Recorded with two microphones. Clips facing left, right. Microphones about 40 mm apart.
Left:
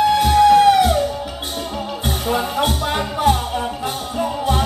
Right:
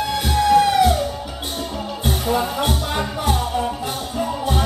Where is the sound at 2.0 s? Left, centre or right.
Centre.